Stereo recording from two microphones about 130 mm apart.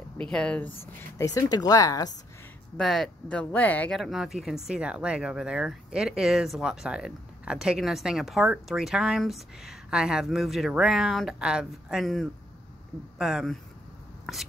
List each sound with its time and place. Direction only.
0.2 s speech: 5° left (ahead or behind)
1.1 s speech: 25° left (ahead or behind)
2.8 s speech: centre (ahead or behind)
4.0 s speech: centre (ahead or behind)